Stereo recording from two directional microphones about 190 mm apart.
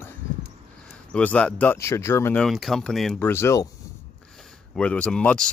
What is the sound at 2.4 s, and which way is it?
Speech, centre (ahead or behind).